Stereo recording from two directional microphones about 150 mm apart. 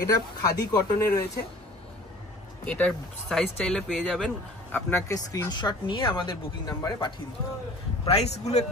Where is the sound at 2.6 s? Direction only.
5° left (ahead or behind); by 7.1 s 30° left (ahead or behind).